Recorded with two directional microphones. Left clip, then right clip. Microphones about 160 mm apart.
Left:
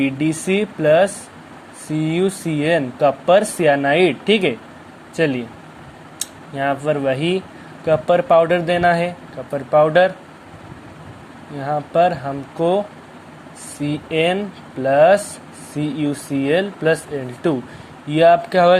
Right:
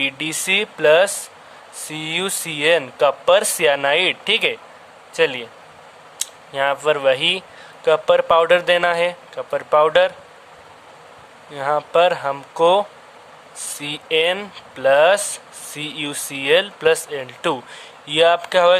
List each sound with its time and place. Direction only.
0.0 s speech: 25° right (ahead or behind)
11.5 s speech: 20° right (ahead or behind)